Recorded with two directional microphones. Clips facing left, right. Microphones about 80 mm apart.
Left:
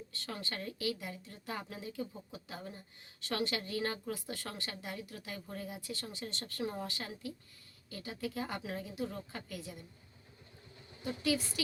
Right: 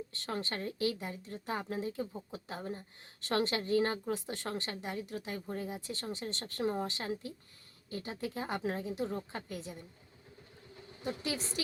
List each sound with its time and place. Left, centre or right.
0.1 s speech: right
11.0 s speech: right